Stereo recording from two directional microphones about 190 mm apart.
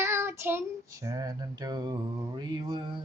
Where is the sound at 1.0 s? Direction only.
20° right (ahead or behind).